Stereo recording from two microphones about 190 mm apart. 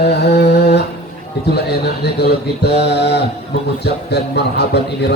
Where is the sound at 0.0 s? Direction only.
60° left (ahead or behind).